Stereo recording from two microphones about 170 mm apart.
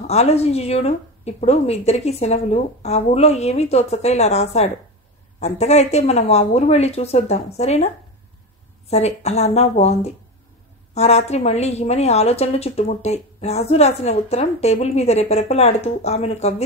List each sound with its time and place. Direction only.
0.0 s a woman's voice: 40° left (ahead or behind)